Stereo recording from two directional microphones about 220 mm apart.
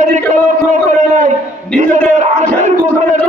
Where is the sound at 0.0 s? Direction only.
35° right (ahead or behind).